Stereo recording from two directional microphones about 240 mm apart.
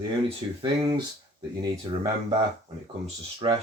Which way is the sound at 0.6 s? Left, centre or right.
Centre.